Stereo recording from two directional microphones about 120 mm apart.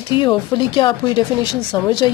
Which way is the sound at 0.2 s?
40° left (ahead or behind).